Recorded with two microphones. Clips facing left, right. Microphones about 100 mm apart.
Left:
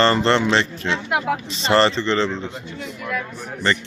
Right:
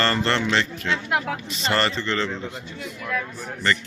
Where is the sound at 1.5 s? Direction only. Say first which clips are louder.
Left 6 dB; 30° left (ahead or behind).